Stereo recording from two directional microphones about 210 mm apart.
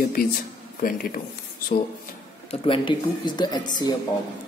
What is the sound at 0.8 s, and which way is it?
Speech, 45° left (ahead or behind).